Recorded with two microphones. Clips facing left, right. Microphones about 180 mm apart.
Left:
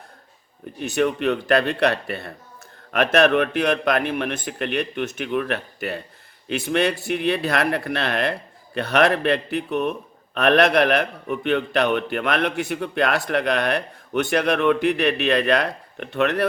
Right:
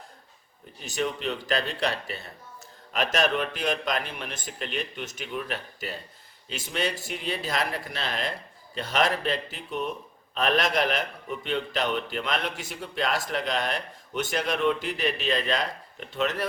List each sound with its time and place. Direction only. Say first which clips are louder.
0.8 s a man's voice: left 8 dB; 60° left (ahead or behind)